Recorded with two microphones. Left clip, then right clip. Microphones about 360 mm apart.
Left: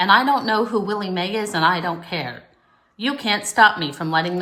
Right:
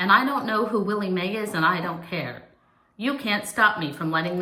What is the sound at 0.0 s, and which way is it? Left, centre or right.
A woman's voice, centre.